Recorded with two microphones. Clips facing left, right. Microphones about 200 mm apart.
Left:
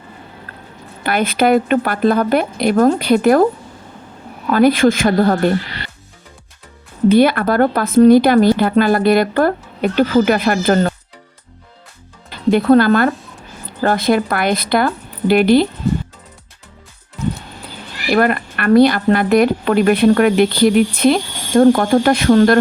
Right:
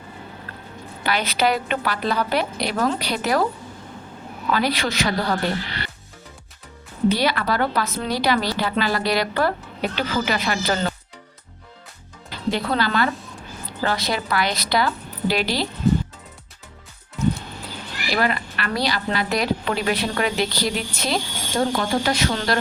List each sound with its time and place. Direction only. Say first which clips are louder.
1.0 s speech: left 7 dB; 55° left (ahead or behind)
4.5 s speech: left 12 dB; 50° left (ahead or behind)
7.1 s speech: left 12 dB; 55° left (ahead or behind)
12.5 s a woman's voice: left 12 dB; 50° left (ahead or behind)
18.1 s speech: left 8 dB; 55° left (ahead or behind)